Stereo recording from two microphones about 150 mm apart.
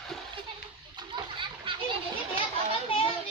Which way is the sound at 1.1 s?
35° right (ahead or behind).